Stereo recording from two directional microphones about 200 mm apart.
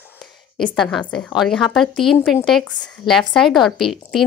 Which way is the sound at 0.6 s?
5° left (ahead or behind).